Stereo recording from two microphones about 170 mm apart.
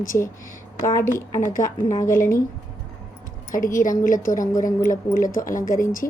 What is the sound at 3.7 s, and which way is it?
Speech, 50° left (ahead or behind).